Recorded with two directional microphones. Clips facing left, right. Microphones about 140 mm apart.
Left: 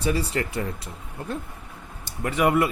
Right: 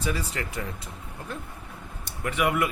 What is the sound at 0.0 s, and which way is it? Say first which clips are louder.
Speech: left 5 dB; 35° left (ahead or behind).